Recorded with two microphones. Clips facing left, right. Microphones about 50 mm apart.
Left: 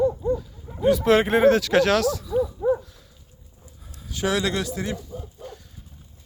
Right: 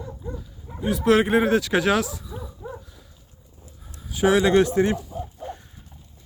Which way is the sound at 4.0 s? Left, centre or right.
Centre.